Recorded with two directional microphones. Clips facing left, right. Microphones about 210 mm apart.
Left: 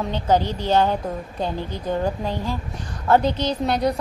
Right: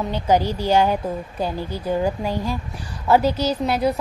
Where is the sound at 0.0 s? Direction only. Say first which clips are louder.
Right 1 dB; 10° right (ahead or behind).